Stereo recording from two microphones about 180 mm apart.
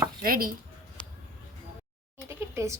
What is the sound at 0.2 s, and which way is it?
Speech, 55° right (ahead or behind).